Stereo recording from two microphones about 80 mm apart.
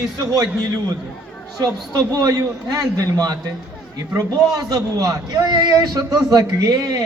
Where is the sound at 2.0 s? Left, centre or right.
Right.